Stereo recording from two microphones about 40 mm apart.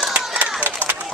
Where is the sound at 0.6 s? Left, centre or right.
Right.